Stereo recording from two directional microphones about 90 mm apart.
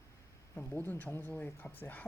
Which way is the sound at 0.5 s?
15° left (ahead or behind).